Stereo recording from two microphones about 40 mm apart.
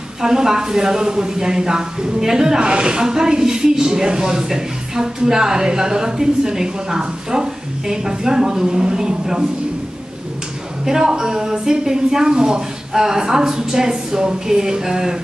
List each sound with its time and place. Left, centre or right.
0.2 s speech: centre
10.9 s speech: centre